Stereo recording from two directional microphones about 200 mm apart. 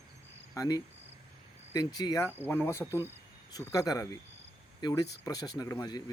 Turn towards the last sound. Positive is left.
turn(degrees=20)  # may be behind; listen again after turning